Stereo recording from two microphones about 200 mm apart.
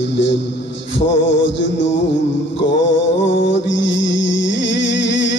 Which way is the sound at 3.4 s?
65° left (ahead or behind).